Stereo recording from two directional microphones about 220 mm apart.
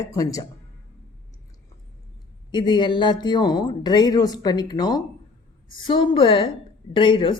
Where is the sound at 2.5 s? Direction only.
20° left (ahead or behind).